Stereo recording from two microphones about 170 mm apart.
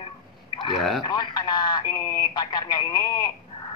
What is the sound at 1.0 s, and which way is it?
Speech, 25° left (ahead or behind).